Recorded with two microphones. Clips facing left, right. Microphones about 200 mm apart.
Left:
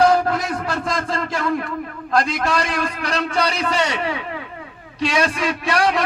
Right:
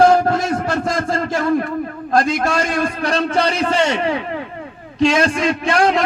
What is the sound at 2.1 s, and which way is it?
A man's voice, 45° right (ahead or behind).